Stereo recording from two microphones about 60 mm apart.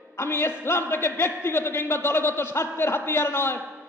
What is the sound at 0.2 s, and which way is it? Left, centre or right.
A man's voice, left.